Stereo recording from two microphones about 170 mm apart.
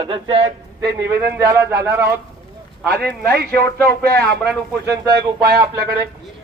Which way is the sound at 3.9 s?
10° left (ahead or behind).